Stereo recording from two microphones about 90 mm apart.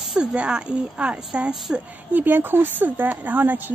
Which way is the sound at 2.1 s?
20° right (ahead or behind).